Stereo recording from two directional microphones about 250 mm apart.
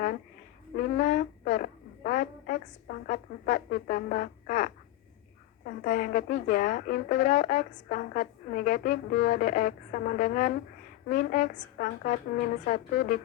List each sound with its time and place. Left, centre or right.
0.8 s a woman's voice: left